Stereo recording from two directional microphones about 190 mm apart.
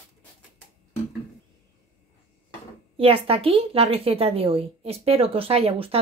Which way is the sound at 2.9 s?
30° right (ahead or behind).